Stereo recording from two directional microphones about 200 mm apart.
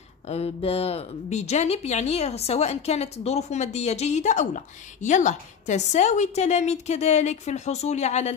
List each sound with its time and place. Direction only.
0.3 s speech: 30° left (ahead or behind)